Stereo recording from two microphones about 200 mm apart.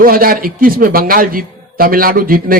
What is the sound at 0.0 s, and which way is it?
Speech, 45° right (ahead or behind).